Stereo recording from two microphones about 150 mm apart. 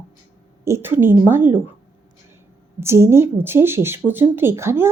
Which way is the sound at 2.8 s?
15° right (ahead or behind).